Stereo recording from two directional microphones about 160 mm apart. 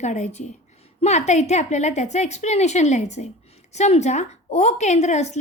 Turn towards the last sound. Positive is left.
turn(degrees=45)  # may be behind; listen again after turning